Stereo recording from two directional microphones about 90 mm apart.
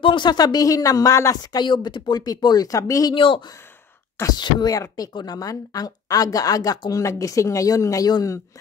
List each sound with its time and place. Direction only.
0.0 s speech: 60° left (ahead or behind); by 1.6 s 40° left (ahead or behind)
1.6 s speech: 55° left (ahead or behind); by 3.2 s 40° left (ahead or behind)
3.2 s speech: 75° left (ahead or behind)
4.3 s speech: 55° left (ahead or behind)
4.7 s speech: 40° left (ahead or behind)